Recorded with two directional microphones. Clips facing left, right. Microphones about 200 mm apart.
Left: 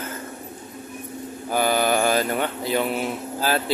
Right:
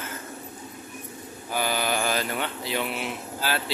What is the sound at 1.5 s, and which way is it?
Speech, 50° left (ahead or behind).